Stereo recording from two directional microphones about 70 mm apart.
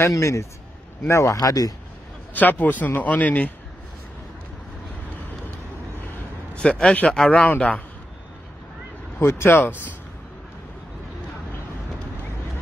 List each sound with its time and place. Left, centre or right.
0.1 s speech: left
2.3 s a man's voice: left
6.5 s a man's voice: centre
9.2 s speech: left
9.5 s a man's voice: left